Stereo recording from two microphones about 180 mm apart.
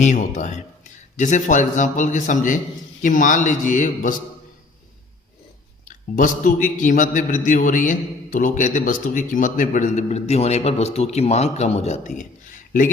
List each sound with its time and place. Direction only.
0.0 s a man's voice: 45° left (ahead or behind)
5.8 s a man's voice: 45° left (ahead or behind)